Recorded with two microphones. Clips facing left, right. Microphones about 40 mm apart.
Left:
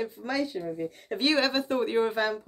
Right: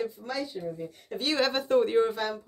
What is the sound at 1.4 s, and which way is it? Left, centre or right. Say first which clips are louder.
Speech: right 2 dB; centre.